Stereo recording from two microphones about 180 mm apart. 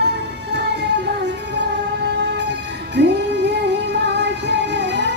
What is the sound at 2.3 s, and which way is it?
Music, 70° right (ahead or behind).